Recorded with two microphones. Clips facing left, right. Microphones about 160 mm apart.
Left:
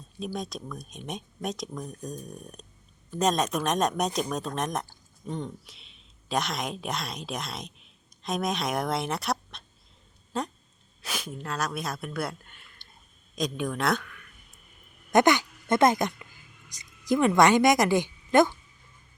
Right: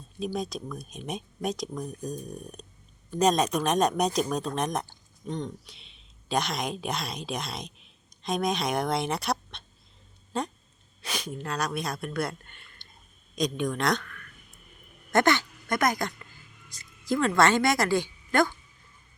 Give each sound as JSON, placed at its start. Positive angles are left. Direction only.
{"t": 0.2, "sound": "a woman's voice", "side_deg": 0}